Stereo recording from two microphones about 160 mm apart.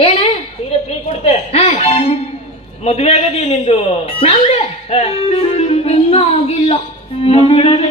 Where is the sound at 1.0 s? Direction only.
40° left (ahead or behind).